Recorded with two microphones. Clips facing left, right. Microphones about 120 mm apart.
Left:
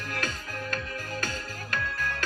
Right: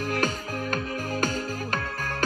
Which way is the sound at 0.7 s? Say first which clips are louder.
Right 8 dB; 45° right (ahead or behind).